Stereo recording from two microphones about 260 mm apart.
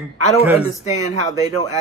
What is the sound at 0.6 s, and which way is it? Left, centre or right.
Speech, left.